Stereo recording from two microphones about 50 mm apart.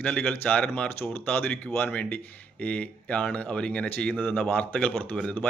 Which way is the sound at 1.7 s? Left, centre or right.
Left.